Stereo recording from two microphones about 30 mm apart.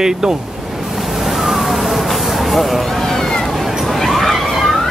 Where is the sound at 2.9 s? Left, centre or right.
Centre.